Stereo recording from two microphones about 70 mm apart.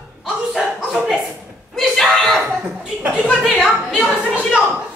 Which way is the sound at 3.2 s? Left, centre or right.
Centre.